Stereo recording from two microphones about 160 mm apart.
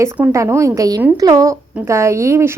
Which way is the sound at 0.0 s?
15° right (ahead or behind).